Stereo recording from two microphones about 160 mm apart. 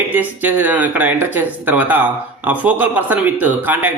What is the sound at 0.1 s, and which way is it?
Speech, 10° right (ahead or behind).